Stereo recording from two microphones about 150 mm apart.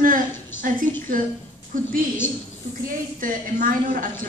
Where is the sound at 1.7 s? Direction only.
65° right (ahead or behind).